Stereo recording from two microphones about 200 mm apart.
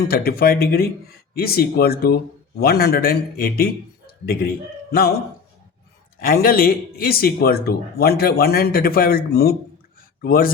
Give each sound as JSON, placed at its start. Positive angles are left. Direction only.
{"t": 0.1, "sound": "a man's voice", "side_deg": 50}
{"t": 6.1, "sound": "a man's voice", "side_deg": 45}